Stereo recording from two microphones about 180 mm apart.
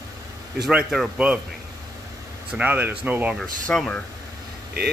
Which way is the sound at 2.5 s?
10° right (ahead or behind).